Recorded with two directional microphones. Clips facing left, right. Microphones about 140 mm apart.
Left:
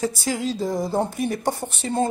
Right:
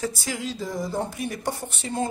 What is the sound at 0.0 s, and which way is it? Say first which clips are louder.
Speech: left 5 dB; 35° left (ahead or behind).